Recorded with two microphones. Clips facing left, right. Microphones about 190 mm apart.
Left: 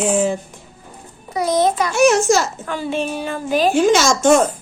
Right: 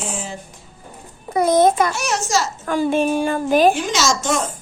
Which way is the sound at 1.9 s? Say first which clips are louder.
Left 8 dB; 55° left (ahead or behind).